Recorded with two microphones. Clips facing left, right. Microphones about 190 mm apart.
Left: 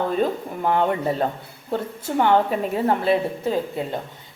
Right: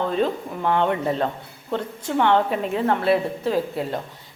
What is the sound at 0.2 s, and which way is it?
Speech, 5° left (ahead or behind).